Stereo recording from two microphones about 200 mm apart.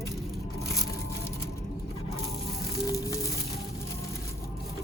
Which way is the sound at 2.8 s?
15° left (ahead or behind).